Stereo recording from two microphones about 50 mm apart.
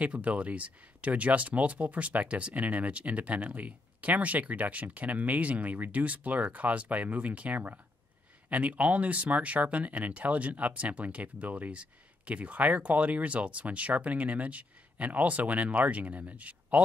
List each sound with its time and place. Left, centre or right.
0.0 s speech: right